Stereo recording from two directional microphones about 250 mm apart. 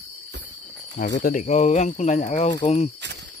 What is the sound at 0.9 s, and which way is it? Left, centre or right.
Speech, left.